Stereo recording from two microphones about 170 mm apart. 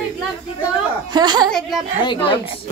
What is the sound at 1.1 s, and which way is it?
Speech, 25° right (ahead or behind).